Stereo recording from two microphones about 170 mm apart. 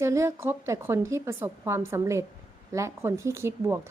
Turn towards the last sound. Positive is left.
turn(degrees=-15)  # may be behind; listen again after turning